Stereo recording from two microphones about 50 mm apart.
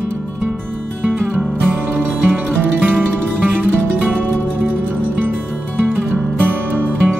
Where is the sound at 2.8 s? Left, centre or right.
Right.